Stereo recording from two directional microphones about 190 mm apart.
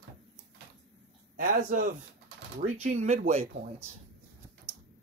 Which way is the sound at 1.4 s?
45° right (ahead or behind).